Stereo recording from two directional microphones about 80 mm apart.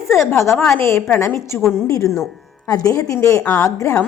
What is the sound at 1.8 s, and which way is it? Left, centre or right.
Speech, left.